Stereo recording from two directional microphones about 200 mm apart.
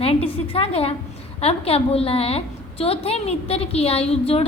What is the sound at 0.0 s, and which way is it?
A woman's voice, 30° left (ahead or behind).